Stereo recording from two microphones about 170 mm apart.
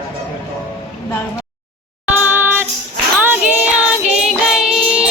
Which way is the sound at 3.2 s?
10° right (ahead or behind).